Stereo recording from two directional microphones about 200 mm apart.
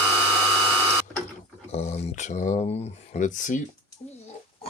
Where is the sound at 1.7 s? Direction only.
35° left (ahead or behind).